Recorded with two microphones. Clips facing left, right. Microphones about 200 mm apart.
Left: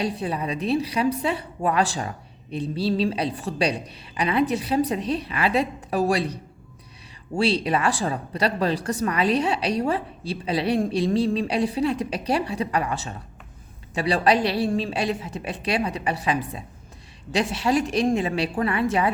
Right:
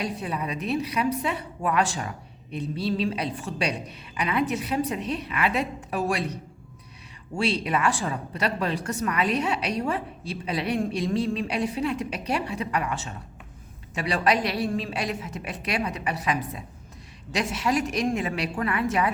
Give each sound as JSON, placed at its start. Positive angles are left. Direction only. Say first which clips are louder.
{"t": 0.0, "sound": "a woman's voice", "louder": "left 4 dB", "side_deg": 30}